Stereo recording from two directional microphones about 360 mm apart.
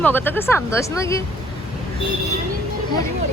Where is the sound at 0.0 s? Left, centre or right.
Centre.